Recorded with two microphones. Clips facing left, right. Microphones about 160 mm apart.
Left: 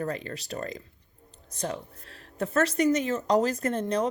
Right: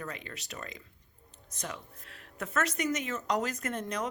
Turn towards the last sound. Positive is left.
turn(degrees=30)  # may be behind; listen again after turning